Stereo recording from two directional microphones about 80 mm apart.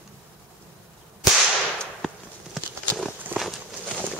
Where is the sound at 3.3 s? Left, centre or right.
Right.